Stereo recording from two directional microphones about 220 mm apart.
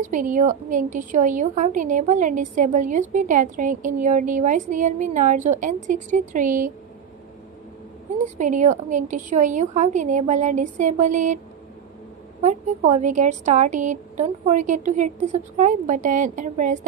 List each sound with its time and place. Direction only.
0.0 s a woman's voice: 35° right (ahead or behind)
8.4 s a woman's voice: 35° right (ahead or behind)
12.4 s a woman's voice: 35° right (ahead or behind)